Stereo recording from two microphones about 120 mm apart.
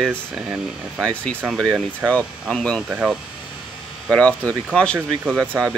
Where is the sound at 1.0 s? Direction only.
10° left (ahead or behind).